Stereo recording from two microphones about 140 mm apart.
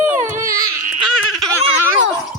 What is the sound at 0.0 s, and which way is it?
Baby cry, 60° right (ahead or behind).